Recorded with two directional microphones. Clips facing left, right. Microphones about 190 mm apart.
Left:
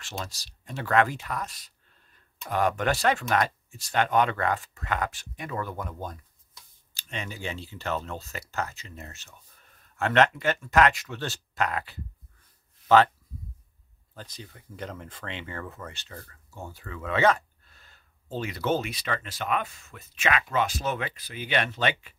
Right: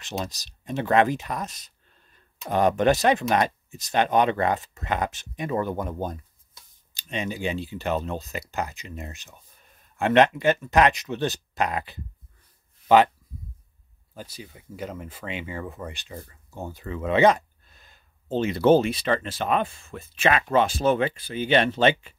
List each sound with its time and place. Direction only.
0.0 s speech: 20° right (ahead or behind)
14.1 s speech: 10° right (ahead or behind); by 21.9 s 30° right (ahead or behind)